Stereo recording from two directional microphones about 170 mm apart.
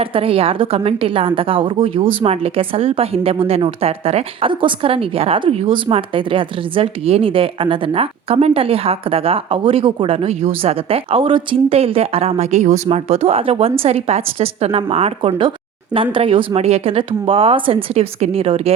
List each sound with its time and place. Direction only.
0.0 s a woman's voice: 35° right (ahead or behind)